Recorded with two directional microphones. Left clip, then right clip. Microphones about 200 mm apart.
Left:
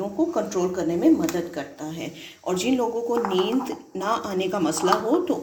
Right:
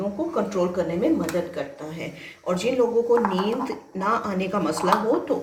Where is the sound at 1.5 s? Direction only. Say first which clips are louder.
Right 1 dB; 50° left (ahead or behind).